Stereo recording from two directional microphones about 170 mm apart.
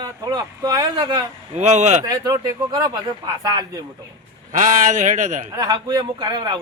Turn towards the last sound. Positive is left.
turn(degrees=-25)  # may be behind; listen again after turning